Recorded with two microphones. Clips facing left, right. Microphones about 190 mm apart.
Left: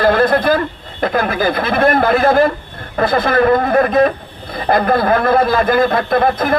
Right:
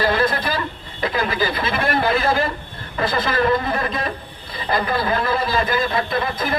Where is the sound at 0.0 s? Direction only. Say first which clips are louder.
Left 7 dB; 55° left (ahead or behind).